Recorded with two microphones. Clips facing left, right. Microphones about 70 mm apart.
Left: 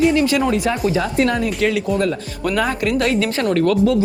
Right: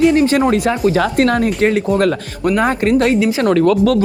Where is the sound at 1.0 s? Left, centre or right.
Right.